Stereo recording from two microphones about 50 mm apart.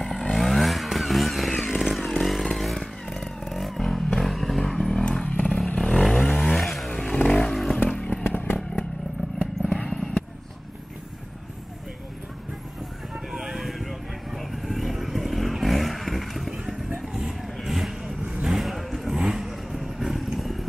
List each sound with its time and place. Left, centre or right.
0.0 s vehicle: centre
5.2 s vehicle: left
5.8 s vehicle: centre
6.5 s vehicle: centre
6.9 s vehicle: centre
7.5 s motorcycle: centre
8.3 s vehicle: left
9.7 s vehicle: centre
13.3 s vehicle: centre